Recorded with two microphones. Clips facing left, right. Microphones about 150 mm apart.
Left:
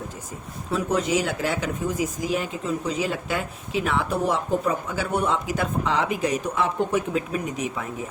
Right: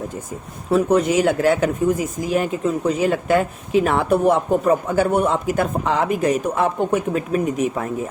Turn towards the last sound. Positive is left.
turn(degrees=-50)  # may be behind; listen again after turning